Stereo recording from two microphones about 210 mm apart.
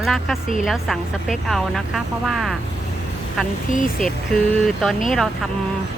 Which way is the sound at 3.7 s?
40° left (ahead or behind).